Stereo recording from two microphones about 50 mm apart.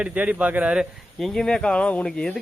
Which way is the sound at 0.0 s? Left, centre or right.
Right.